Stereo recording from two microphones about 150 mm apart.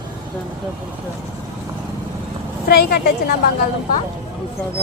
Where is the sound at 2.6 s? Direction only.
90° left.